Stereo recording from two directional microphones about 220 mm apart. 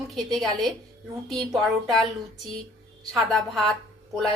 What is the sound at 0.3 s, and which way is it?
A woman's voice, centre (ahead or behind).